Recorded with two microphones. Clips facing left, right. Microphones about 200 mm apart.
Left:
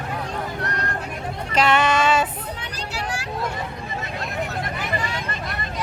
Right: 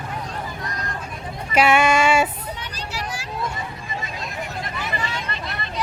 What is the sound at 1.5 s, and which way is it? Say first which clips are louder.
Female singing: right 2 dB; 10° right (ahead or behind).